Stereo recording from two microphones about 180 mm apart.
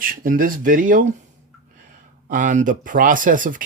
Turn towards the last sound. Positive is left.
turn(degrees=-50)  # may be behind; listen again after turning